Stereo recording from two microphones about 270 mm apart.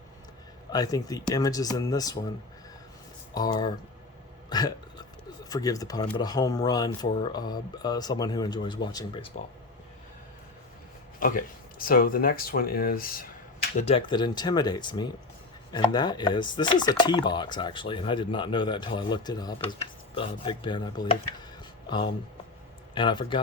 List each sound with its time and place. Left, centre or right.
0.7 s chopping: centre
3.3 s chopping: centre
4.4 s a sound: centre
5.5 s chopping: centre
11.2 s speech: left; by 15.0 s centre
15.7 s chopping: centre
21.8 s speech: centre
23.0 s chopping: centre